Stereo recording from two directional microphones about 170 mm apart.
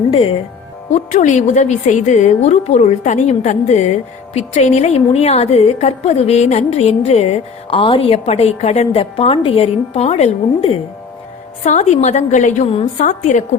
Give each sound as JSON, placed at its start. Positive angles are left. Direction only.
{"t": 1.1, "sound": "a woman's voice", "side_deg": 45}